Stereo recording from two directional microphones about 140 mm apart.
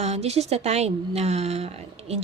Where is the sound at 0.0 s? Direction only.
50° right (ahead or behind).